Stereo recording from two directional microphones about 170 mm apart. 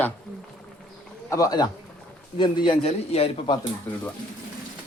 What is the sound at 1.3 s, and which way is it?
A man's voice, 20° left (ahead or behind).